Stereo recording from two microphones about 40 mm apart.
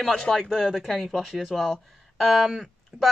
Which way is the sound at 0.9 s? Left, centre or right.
Centre.